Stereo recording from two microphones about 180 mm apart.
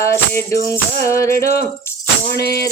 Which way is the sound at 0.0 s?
15° left (ahead or behind).